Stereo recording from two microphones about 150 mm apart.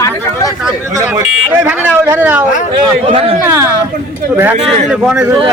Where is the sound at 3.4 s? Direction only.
15° right (ahead or behind).